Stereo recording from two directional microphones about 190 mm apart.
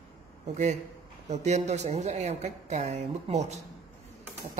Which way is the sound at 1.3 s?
35° right (ahead or behind).